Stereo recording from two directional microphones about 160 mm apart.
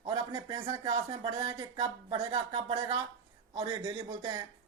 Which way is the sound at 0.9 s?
40° right (ahead or behind).